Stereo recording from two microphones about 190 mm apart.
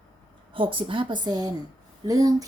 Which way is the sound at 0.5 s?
25° right (ahead or behind).